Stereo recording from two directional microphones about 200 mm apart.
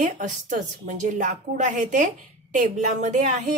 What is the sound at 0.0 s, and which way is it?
Speech, 40° right (ahead or behind).